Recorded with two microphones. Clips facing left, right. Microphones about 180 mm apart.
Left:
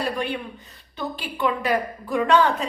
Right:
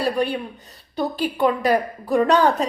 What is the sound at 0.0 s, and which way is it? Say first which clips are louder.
A woman's voice: right 4 dB; 35° right (ahead or behind).